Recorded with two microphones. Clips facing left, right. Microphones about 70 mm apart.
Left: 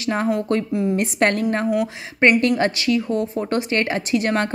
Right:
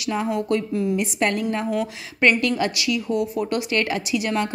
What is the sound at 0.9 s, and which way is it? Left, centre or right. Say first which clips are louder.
Speech: left 4 dB; left.